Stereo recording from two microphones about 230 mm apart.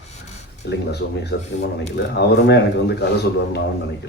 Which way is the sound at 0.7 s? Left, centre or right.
Left.